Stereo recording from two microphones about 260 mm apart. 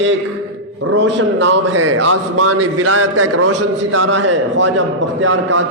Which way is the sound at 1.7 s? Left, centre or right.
Right.